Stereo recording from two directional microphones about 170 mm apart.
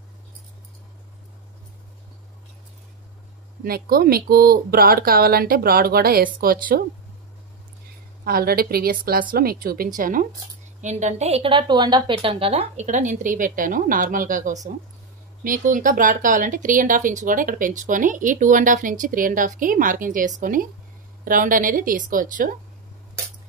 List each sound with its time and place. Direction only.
3.6 s speech: 60° right (ahead or behind)
8.2 s speech: 60° right (ahead or behind)